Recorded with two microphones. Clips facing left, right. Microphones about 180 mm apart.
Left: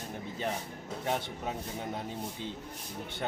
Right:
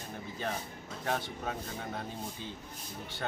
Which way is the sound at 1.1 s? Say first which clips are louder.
Left 1 dB; 20° left (ahead or behind).